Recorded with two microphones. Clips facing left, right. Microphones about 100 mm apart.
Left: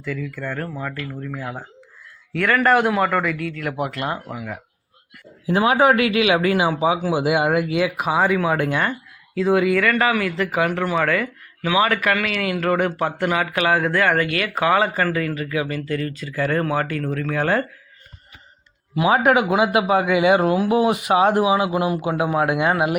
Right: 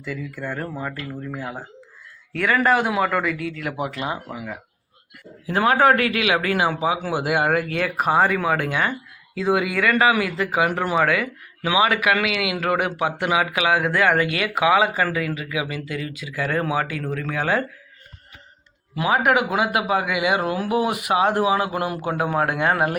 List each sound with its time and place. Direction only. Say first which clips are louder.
0.0 s speech: left 2 dB; 10° right (ahead or behind)
1.3 s speech: left 1 dB; 5° right (ahead or behind)
5.5 s a man's voice: left 1 dB; 15° left (ahead or behind); by 14.5 s 20° right (ahead or behind)
14.5 s speech: right 1 dB; 5° right (ahead or behind)
18.9 s a man's voice: left 3 dB; 25° left (ahead or behind)